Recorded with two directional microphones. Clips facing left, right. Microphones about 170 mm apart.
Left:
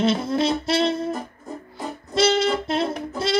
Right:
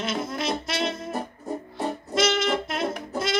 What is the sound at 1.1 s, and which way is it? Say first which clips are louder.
Music: right 1 dB; 35° right (ahead or behind).